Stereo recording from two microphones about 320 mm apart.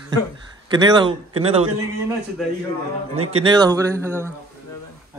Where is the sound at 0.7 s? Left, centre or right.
Centre.